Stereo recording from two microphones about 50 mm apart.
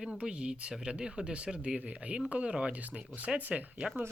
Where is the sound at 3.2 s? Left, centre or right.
Right.